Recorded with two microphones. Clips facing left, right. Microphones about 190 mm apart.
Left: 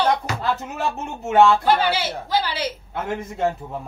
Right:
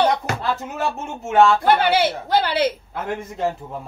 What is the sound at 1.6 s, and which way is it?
A woman's voice, 60° right (ahead or behind).